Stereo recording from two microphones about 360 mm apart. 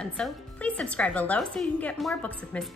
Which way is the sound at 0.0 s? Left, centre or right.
Centre.